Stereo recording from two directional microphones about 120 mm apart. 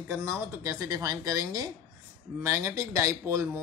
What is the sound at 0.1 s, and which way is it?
A woman's voice, 25° right (ahead or behind).